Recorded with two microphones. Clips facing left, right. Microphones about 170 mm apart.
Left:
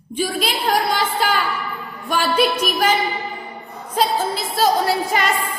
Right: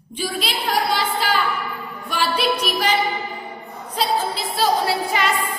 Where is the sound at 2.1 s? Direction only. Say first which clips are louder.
Left 3 dB; 45° left (ahead or behind).